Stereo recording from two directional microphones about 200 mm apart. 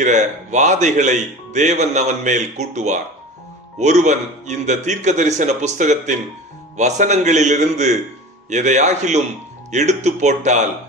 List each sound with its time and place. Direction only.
0.0 s speech: 35° right (ahead or behind)